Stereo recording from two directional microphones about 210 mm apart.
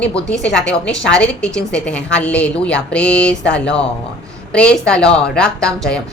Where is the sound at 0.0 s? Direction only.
5° left (ahead or behind).